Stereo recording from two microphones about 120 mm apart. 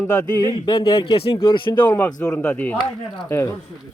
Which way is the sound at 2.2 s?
10° left (ahead or behind).